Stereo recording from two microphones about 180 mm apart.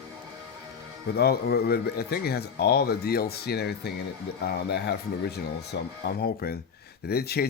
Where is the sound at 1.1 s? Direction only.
60° left (ahead or behind).